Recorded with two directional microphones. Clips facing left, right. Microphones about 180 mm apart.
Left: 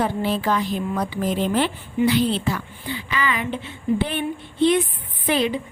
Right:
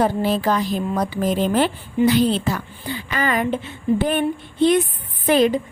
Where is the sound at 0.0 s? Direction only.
40° right (ahead or behind).